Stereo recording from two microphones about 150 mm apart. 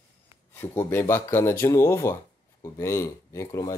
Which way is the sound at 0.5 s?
15° left (ahead or behind).